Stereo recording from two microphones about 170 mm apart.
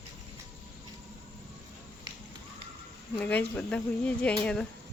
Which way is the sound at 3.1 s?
10° left (ahead or behind).